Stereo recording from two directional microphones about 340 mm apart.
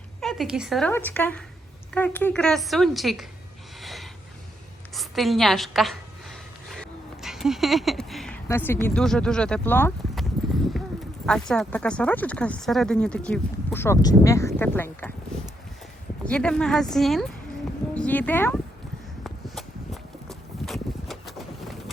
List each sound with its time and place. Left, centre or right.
0.2 s speech: centre
3.8 s a sound: centre
9.0 s speech: centre
11.3 s speech: centre
16.2 s speech: centre
19.2 s walk: centre
20.2 s boat: centre